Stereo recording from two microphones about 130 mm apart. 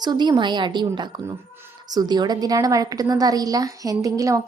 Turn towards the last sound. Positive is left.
turn(degrees=-25)  # may be behind; listen again after turning